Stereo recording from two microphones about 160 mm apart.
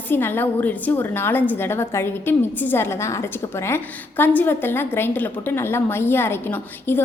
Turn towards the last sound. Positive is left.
turn(degrees=15)  # may be behind; listen again after turning